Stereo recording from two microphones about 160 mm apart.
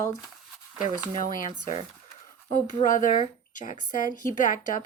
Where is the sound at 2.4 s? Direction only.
50° left (ahead or behind).